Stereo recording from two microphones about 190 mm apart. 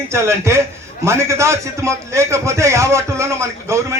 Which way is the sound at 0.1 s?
15° right (ahead or behind).